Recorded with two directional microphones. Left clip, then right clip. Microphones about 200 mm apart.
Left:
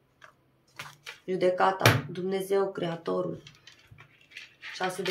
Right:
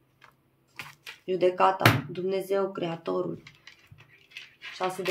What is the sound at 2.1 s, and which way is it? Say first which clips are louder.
Speech: even; 5° right (ahead or behind).